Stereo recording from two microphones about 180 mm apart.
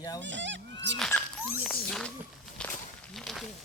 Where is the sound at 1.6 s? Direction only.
5° left (ahead or behind).